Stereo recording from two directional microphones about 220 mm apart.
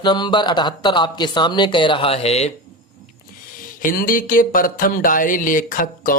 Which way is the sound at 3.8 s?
40° left (ahead or behind).